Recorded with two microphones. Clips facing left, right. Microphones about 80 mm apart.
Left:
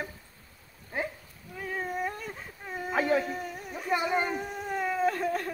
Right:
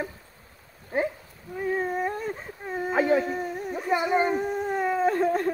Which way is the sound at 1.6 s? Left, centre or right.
Right.